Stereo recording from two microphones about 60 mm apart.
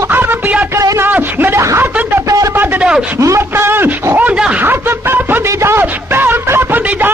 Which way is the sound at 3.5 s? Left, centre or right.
Right.